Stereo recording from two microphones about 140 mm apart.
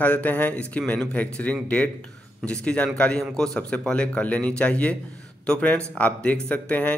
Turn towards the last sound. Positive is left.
turn(degrees=10)  # may be behind; listen again after turning